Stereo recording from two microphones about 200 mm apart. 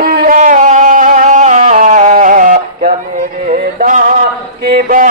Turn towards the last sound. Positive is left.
turn(degrees=-45)  # may be behind; listen again after turning